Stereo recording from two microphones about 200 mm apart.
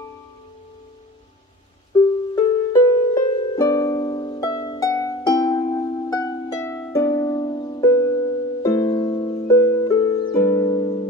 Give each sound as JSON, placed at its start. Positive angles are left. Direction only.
{"t": 2.3, "sound": "music", "side_deg": 15}